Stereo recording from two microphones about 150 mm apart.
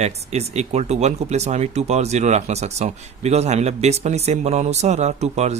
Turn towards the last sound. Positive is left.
turn(degrees=-50)  # may be behind; listen again after turning